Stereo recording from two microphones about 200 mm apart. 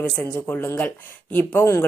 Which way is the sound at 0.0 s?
10° left (ahead or behind).